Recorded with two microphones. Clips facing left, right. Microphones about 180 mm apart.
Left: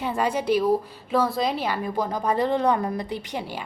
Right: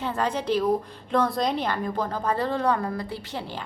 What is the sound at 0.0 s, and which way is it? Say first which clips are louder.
A woman's voice: left 2 dB; 10° left (ahead or behind).